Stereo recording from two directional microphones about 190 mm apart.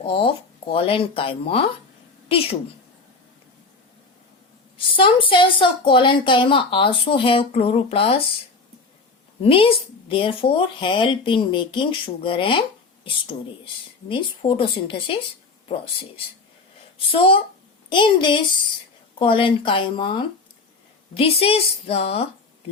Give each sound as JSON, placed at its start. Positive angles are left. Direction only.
{"t": 0.0, "sound": "a woman's voice", "side_deg": 30}
{"t": 4.9, "sound": "a woman's voice", "side_deg": 30}
{"t": 9.4, "sound": "a woman's voice", "side_deg": 30}
{"t": 14.1, "sound": "a woman's voice", "side_deg": 30}
{"t": 17.1, "sound": "a woman's voice", "side_deg": 30}